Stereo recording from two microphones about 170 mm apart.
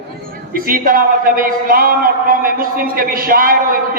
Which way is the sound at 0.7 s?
55° right (ahead or behind).